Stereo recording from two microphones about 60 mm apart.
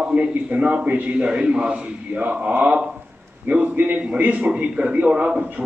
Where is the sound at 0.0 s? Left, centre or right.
Right.